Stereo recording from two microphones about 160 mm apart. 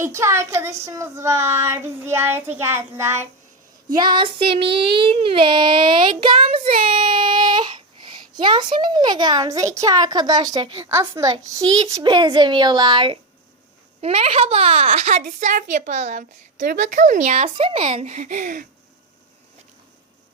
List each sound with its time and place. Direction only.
0.0 s speech: 20° right (ahead or behind)
3.9 s child singing: 25° right (ahead or behind)
8.1 s a child's voice: 30° right (ahead or behind)
10.8 s a child's voice: 15° right (ahead or behind); by 18.6 s 50° right (ahead or behind)